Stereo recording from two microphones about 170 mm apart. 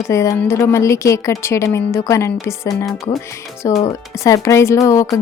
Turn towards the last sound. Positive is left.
turn(degrees=20)  # may be behind; listen again after turning